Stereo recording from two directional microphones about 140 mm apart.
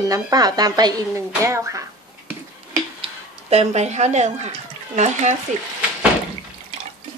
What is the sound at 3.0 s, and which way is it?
Speech, 50° right (ahead or behind).